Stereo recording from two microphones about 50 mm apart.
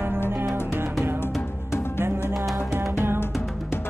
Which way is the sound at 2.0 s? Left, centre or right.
Right.